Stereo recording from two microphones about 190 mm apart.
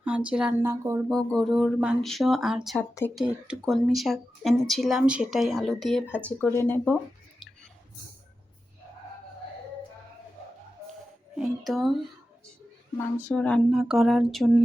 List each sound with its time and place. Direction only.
0.0 s speech: 5° right (ahead or behind)
0.7 s speech: 15° right (ahead or behind)
1.1 s speech: 5° left (ahead or behind)
11.3 s speech: centre (ahead or behind)
13.2 s speech: 5° left (ahead or behind)